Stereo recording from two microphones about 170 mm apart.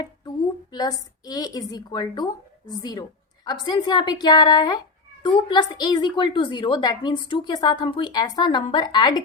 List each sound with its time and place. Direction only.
0.7 s a woman's voice: 25° left (ahead or behind)